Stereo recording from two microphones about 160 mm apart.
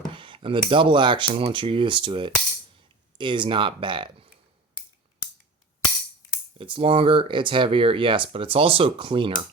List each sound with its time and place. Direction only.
0.1 s speech: 30° right (ahead or behind)
6.6 s speech: 35° right (ahead or behind)